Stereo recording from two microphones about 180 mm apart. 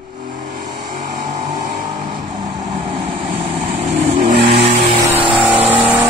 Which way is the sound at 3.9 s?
45° right (ahead or behind).